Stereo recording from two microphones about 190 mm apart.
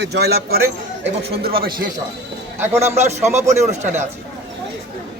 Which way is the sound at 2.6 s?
15° right (ahead or behind).